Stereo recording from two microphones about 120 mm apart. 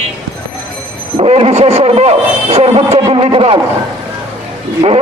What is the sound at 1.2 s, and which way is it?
A man's voice, 55° right (ahead or behind).